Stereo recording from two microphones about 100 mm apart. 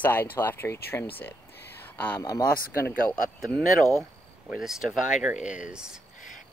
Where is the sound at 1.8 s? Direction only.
20° left (ahead or behind).